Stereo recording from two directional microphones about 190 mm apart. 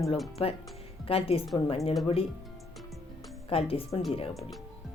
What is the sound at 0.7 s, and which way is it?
Music, 30° left (ahead or behind).